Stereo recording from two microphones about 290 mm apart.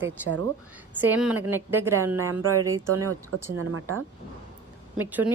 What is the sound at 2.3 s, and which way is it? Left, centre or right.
Speech, right.